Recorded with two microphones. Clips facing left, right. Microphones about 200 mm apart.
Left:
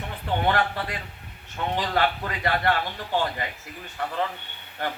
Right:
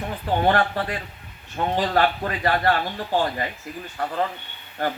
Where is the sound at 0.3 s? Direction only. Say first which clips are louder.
Right 4 dB; 40° right (ahead or behind).